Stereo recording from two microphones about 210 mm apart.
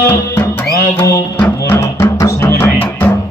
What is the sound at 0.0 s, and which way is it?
Music, 10° left (ahead or behind).